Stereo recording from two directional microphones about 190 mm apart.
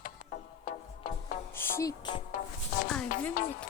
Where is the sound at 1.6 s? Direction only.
15° left (ahead or behind).